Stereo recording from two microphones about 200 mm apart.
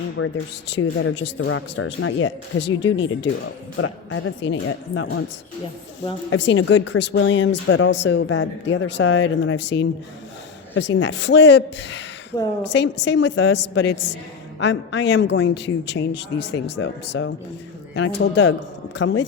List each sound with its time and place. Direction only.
0.2 s speech: 90° left
0.7 s speech: 80° left
3.8 s speech: 80° left
6.3 s a man's voice: 70° left (ahead or behind)
12.3 s a woman's voice: 15° left (ahead or behind)
12.7 s a man's voice: 60° left (ahead or behind)